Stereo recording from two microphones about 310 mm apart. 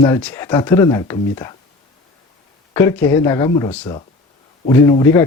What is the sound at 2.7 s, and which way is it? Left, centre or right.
Speech, centre.